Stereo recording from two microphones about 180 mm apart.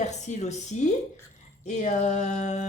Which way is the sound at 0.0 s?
40° left (ahead or behind).